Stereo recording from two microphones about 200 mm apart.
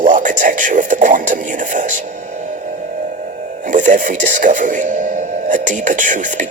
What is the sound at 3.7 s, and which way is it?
Speech, 40° right (ahead or behind).